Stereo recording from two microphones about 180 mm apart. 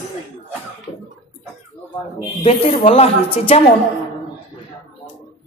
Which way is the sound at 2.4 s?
30° left (ahead or behind).